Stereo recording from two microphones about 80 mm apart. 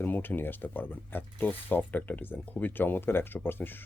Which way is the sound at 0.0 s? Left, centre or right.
Left.